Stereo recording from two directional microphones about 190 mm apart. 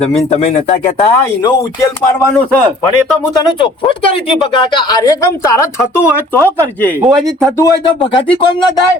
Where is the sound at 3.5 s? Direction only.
25° left (ahead or behind).